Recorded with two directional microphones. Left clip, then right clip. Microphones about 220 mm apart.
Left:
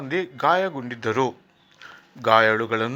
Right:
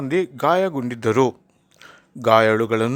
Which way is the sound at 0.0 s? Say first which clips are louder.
Right 2 dB; 55° right (ahead or behind).